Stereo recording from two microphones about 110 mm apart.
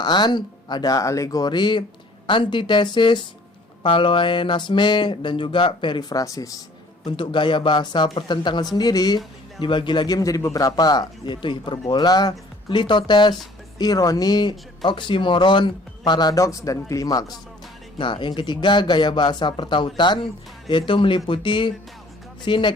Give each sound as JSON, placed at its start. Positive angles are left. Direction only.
{"t": 0.0, "sound": "speech", "side_deg": 40}
{"t": 7.0, "sound": "speech", "side_deg": 45}
{"t": 17.9, "sound": "speech", "side_deg": 50}